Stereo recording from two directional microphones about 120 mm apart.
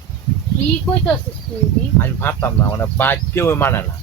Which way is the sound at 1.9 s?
20° left (ahead or behind).